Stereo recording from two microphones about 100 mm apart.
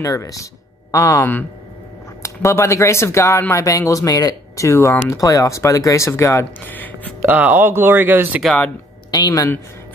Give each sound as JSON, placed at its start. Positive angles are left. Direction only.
{"t": 0.0, "sound": "speech", "side_deg": 35}
{"t": 2.2, "sound": "speech", "side_deg": 30}
{"t": 6.6, "sound": "speech", "side_deg": 20}
{"t": 7.2, "sound": "speech", "side_deg": -15}
{"t": 9.1, "sound": "speech", "side_deg": 40}